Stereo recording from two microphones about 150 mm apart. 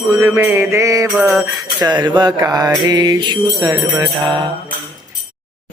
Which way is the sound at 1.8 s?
30° right (ahead or behind).